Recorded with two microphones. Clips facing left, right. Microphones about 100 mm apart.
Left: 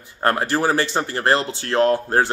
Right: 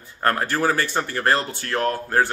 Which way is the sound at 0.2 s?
20° left (ahead or behind).